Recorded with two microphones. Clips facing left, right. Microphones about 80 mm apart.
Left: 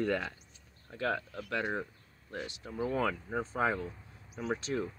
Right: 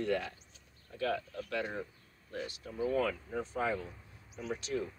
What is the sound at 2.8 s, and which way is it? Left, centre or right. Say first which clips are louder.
Speech: even; left.